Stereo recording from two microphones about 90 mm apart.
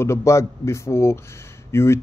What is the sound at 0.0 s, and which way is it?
Speech, 30° left (ahead or behind).